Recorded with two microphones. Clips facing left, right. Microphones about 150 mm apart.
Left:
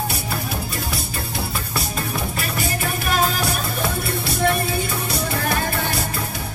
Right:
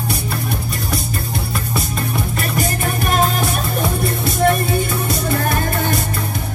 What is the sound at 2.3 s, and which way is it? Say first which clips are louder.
Music: right 4 dB; 45° right (ahead or behind).